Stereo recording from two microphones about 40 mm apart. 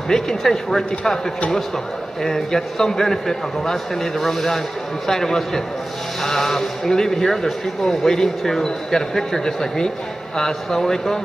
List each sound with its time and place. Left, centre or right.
0.1 s speech: centre
2.2 s speech: centre